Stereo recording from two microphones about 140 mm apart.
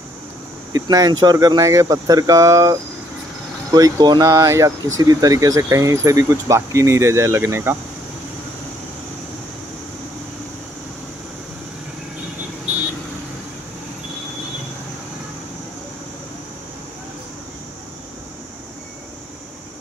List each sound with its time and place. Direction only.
0.7 s speech: 25° right (ahead or behind)